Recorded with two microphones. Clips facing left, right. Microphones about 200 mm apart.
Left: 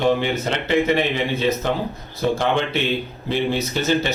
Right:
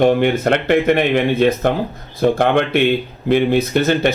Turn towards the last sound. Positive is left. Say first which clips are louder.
# right 5 dB
turn(degrees=-55)  # may be behind; listen again after turning